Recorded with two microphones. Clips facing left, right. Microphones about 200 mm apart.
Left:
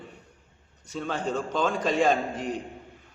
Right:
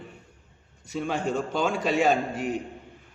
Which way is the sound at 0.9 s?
10° right (ahead or behind).